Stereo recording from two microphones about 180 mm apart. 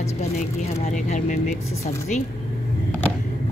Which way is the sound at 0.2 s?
40° left (ahead or behind).